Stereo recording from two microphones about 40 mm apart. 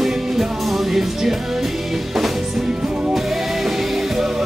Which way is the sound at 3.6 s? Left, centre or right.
Centre.